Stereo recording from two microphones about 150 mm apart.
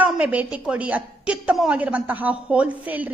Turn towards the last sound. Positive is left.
turn(degrees=-10)  # may be behind; listen again after turning